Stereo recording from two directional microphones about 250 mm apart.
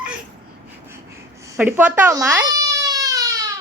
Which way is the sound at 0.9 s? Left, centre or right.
Centre.